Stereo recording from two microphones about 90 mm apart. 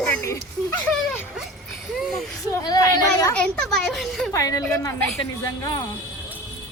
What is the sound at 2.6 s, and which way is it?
Speech, 40° left (ahead or behind).